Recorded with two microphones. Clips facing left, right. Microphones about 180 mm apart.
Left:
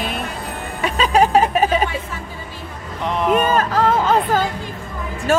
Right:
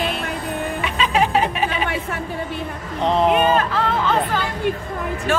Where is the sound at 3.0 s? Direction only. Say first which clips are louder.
Right 4 dB; 30° right (ahead or behind).